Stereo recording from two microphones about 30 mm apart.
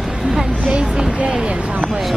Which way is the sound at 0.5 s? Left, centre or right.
Right.